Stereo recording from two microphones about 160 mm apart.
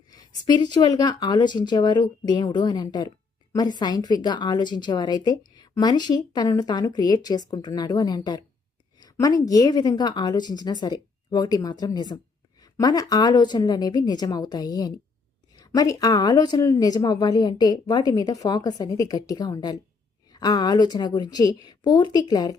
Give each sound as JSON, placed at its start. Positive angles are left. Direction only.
{"t": 0.1, "sound": "a woman's voice", "side_deg": 25}